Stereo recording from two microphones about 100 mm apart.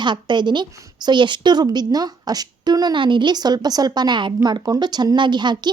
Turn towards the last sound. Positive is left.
turn(degrees=-50)  # may be behind; listen again after turning